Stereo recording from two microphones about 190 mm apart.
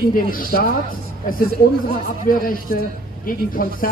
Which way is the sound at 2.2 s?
50° left (ahead or behind).